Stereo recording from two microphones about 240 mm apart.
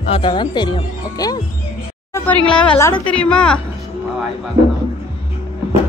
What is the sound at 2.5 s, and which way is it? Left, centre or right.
Speech, centre.